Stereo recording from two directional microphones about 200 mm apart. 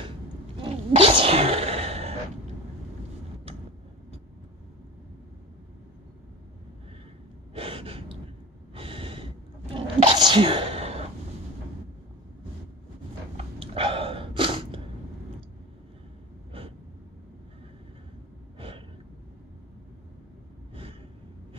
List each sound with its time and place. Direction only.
0.6 s sneeze: 25° right (ahead or behind)
7.5 s gasp: 25° right (ahead or behind)
8.7 s sneeze: 25° right (ahead or behind)
13.4 s a sound: 30° right (ahead or behind)
16.5 s gasp: 25° right (ahead or behind)